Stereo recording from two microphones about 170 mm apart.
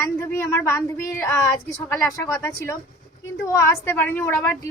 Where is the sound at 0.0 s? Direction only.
15° left (ahead or behind).